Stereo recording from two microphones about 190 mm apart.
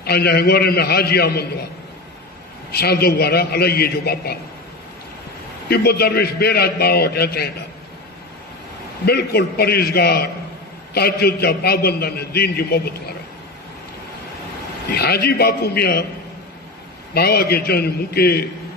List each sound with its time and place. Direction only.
0.0 s a man's voice: 55° left (ahead or behind)
2.7 s a man's voice: 55° left (ahead or behind)
5.7 s a man's voice: 55° left (ahead or behind)
9.0 s a man's voice: 55° left (ahead or behind)
14.9 s a man's voice: 55° left (ahead or behind)
17.1 s a man's voice: 55° left (ahead or behind)